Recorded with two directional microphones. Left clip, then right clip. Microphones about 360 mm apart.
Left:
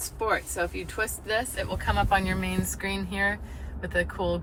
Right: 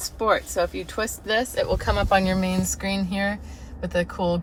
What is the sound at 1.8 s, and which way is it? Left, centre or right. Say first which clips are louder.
A woman's voice: right 1 dB; centre.